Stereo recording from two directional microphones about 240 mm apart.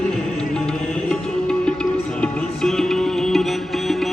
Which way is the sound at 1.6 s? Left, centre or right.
Centre.